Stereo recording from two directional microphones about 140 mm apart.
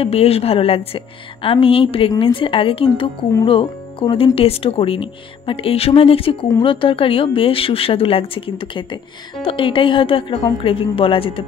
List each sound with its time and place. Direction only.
0.0 s speech: 45° left (ahead or behind)